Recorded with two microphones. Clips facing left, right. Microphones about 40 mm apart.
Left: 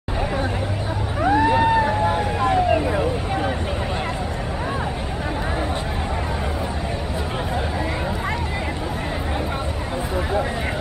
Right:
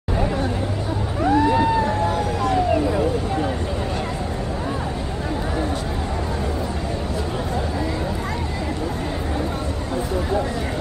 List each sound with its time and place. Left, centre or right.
1.2 s vehicle: left